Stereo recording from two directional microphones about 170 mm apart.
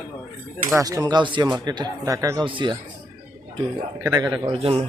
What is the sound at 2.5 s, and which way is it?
Speech, 30° right (ahead or behind).